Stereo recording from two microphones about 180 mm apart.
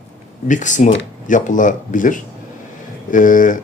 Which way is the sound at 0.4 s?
45° left (ahead or behind).